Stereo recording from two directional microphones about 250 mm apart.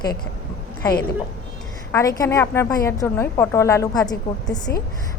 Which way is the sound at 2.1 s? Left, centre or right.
Centre.